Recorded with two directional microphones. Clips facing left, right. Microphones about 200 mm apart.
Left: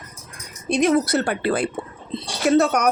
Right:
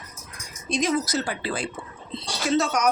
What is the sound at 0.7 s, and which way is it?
A woman's voice, 60° left (ahead or behind).